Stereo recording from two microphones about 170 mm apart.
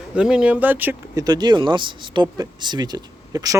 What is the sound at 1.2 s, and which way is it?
Speech, 25° right (ahead or behind).